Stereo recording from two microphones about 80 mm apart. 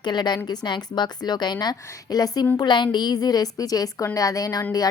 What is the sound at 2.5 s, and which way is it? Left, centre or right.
Speech, left.